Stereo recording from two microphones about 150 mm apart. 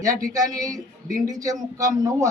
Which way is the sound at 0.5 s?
25° right (ahead or behind).